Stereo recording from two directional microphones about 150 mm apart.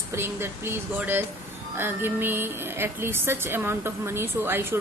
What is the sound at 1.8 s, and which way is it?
A woman's voice, 15° right (ahead or behind).